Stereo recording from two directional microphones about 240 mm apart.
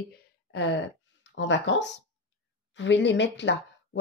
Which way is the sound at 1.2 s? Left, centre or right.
Left.